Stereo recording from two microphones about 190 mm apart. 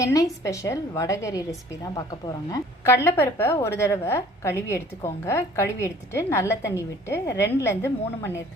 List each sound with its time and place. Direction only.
0.0 s a woman's voice: 15° left (ahead or behind)